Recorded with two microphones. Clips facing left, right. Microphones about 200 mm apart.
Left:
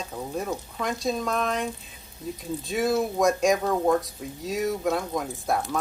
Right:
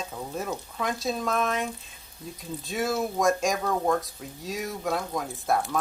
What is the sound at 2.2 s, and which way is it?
Speech, 20° left (ahead or behind).